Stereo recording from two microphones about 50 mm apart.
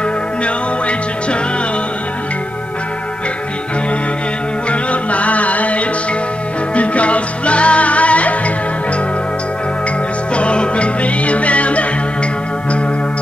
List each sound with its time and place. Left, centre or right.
4.6 s music: left
10.3 s music: left